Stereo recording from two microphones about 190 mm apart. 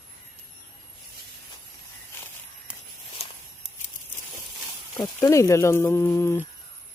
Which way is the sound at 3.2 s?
30° left (ahead or behind).